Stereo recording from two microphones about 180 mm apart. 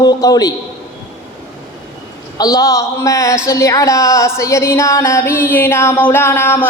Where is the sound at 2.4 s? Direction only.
20° left (ahead or behind).